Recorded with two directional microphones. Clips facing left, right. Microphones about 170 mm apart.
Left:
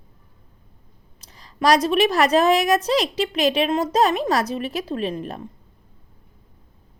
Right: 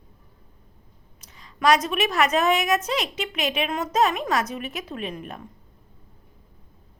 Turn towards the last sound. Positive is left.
turn(degrees=30)  # may be behind; listen again after turning